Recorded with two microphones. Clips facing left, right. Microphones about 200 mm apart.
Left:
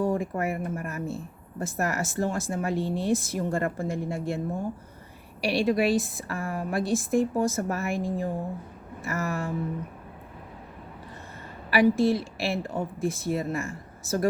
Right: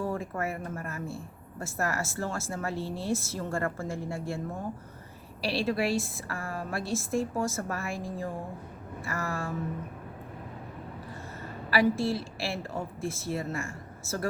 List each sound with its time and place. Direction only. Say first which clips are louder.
0.0 s a woman's voice: left 5 dB; 15° left (ahead or behind)
5.4 s a woman's voice: left 5 dB; 15° left (ahead or behind)
11.7 s a woman's voice: left 5 dB; 15° left (ahead or behind)